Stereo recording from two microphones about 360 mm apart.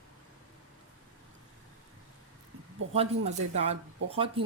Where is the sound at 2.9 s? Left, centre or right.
Centre.